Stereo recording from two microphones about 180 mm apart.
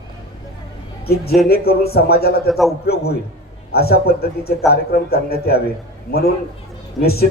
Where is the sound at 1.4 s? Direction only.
60° left (ahead or behind).